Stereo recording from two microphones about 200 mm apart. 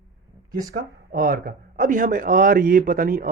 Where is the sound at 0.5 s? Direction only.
45° right (ahead or behind).